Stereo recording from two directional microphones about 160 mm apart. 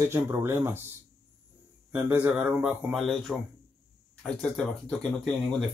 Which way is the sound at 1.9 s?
10° right (ahead or behind).